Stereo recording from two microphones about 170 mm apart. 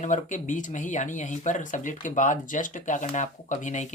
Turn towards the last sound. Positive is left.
turn(degrees=45)  # may be behind; listen again after turning